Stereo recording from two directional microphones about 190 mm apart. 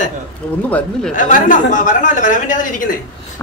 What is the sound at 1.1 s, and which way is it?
Speech, 45° left (ahead or behind).